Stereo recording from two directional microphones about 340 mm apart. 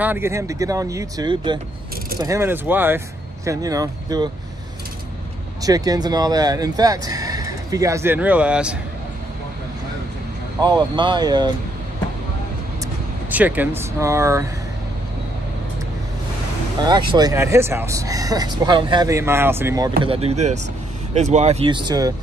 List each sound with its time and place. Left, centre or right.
0.0 s speech: centre
5.6 s speech: centre
10.6 s speech: centre
13.3 s speech: centre
16.8 s speech: centre